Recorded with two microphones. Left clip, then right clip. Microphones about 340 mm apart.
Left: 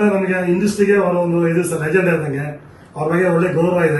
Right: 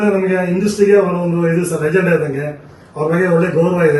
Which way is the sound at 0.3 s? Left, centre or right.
Centre.